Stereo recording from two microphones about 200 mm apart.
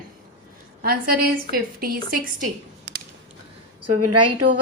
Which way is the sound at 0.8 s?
50° right (ahead or behind).